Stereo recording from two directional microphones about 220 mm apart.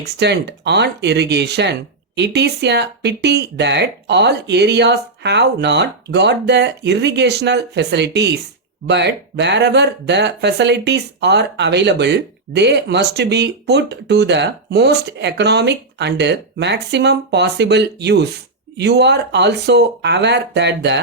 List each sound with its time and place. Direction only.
0.0 s speech: 50° right (ahead or behind)